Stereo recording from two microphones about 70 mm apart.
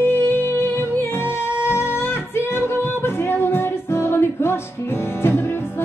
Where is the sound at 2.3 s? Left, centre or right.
Left.